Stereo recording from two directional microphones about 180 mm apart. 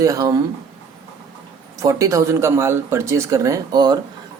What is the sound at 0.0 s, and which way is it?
Speech, 20° right (ahead or behind).